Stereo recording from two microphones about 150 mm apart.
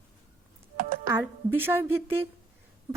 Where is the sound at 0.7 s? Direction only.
65° right (ahead or behind).